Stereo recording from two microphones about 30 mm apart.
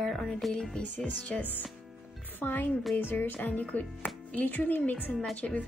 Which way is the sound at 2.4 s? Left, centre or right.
Left.